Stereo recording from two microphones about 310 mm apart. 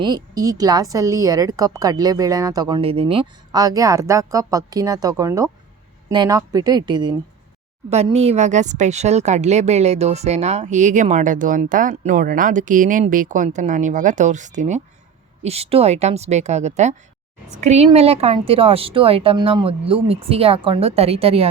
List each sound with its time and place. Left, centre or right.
0.0 s a woman's voice: centre